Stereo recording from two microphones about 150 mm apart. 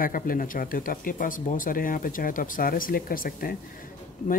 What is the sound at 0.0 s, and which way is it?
Speech, 65° left (ahead or behind).